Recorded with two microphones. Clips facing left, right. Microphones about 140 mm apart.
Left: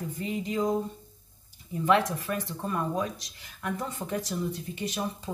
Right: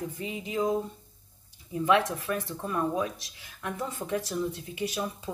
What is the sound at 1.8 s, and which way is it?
Speech, centre (ahead or behind).